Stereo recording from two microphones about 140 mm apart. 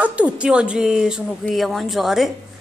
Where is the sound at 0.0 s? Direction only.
10° right (ahead or behind).